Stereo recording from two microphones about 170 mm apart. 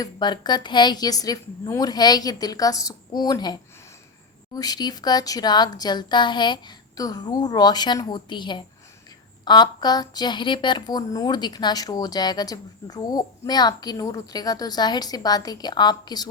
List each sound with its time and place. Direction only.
0.0 s a woman's voice: 25° left (ahead or behind)